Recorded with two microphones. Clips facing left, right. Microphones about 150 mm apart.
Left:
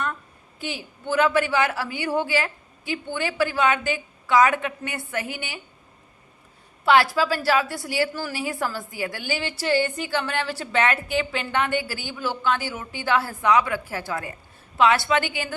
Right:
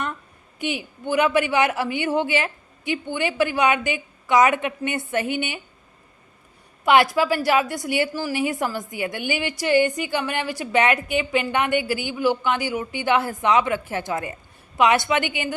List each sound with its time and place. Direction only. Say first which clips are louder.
0.6 s a woman's voice: right 5 dB; 15° right (ahead or behind)
6.8 s a woman's voice: right 2 dB; 20° right (ahead or behind)